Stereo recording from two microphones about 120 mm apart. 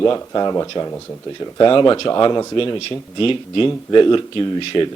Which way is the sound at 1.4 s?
40° left (ahead or behind).